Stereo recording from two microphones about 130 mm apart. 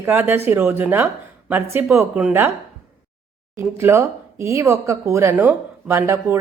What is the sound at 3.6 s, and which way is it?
Speech, 20° right (ahead or behind).